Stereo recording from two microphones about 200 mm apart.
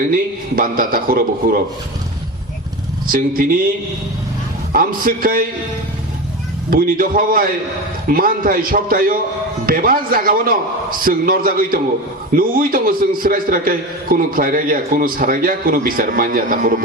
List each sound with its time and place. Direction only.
0.1 s a man's voice: 45° right (ahead or behind)
3.1 s a man's voice: 45° right (ahead or behind)
4.7 s a man's voice: 45° right (ahead or behind)
6.7 s a man's voice: 45° right (ahead or behind)